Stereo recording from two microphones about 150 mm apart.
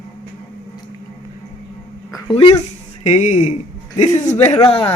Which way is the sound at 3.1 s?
55° left (ahead or behind).